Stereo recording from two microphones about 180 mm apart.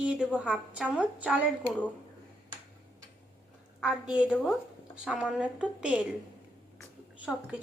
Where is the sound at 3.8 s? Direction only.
5° right (ahead or behind).